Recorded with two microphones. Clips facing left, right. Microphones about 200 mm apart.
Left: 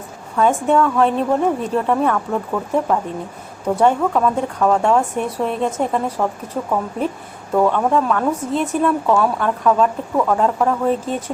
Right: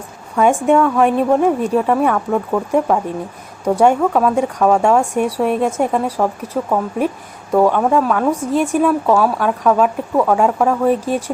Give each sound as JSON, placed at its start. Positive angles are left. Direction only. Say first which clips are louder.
{"t": 0.3, "sound": "a woman's voice", "louder": "right 3 dB", "side_deg": -10}
{"t": 3.8, "sound": "a woman's voice", "louder": "right 3 dB", "side_deg": -10}